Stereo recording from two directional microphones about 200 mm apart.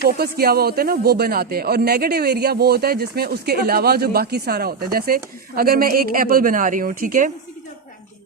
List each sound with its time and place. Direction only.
0.1 s speech: 50° right (ahead or behind)